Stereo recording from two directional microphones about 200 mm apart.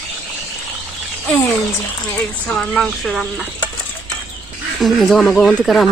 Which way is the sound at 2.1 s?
5° left (ahead or behind).